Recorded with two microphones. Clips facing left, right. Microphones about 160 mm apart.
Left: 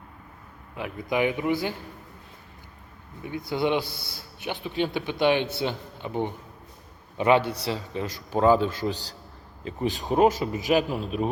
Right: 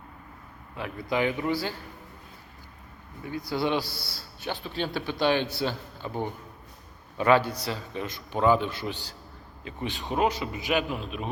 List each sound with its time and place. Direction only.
0.8 s a man's voice: 20° left (ahead or behind)
3.2 s a man's voice: 20° left (ahead or behind); by 11.3 s 40° left (ahead or behind)